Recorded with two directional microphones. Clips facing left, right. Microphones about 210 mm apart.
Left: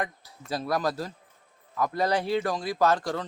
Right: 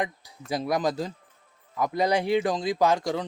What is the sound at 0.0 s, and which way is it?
Speech, 15° right (ahead or behind).